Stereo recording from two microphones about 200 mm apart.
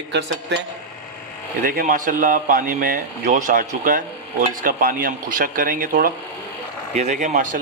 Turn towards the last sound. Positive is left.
turn(degrees=-40)  # may be behind; listen again after turning